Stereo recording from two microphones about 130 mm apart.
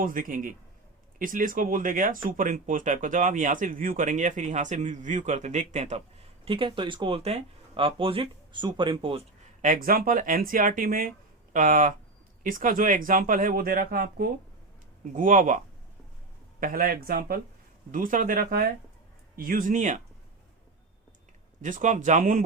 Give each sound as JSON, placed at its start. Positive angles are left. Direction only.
{"t": 0.0, "sound": "speech", "side_deg": -90}
{"t": 6.4, "sound": "speech", "side_deg": -40}
{"t": 9.6, "sound": "speech", "side_deg": -90}
{"t": 16.6, "sound": "speech", "side_deg": -90}
{"t": 21.6, "sound": "speech", "side_deg": -75}